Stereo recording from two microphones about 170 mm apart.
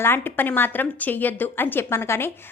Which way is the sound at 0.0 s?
10° left (ahead or behind).